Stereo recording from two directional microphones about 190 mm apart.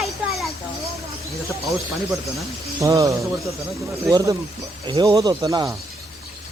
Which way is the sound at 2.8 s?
15° right (ahead or behind).